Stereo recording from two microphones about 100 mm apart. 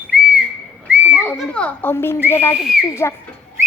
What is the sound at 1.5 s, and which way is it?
Speech, 15° left (ahead or behind).